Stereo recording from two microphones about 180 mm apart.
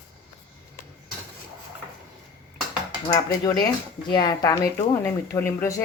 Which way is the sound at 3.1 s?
25° left (ahead or behind).